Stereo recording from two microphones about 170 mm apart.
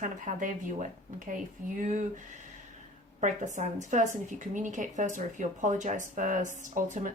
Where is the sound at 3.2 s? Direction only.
45° right (ahead or behind).